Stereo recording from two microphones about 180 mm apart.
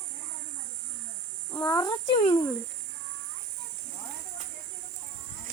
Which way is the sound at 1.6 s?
20° left (ahead or behind).